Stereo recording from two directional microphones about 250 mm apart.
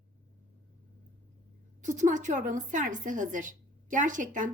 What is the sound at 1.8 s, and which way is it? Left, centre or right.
A woman's voice, right.